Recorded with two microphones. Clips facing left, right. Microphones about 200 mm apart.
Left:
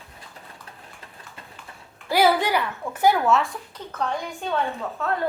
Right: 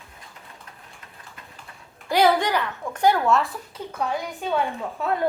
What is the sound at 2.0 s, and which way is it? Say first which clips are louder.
A child's voice: even; 5° left (ahead or behind).